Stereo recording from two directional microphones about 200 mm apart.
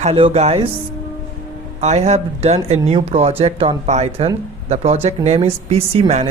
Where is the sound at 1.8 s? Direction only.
35° right (ahead or behind).